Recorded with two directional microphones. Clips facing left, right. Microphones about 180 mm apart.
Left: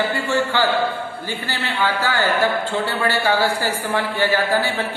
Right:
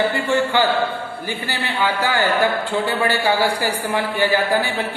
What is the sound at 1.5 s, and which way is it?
A man's voice, 15° right (ahead or behind).